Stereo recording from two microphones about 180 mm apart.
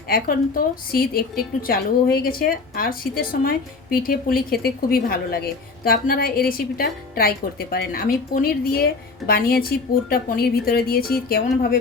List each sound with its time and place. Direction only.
0.1 s a woman's voice: 55° left (ahead or behind)